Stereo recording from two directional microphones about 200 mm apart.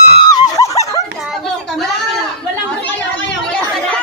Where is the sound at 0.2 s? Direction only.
20° left (ahead or behind).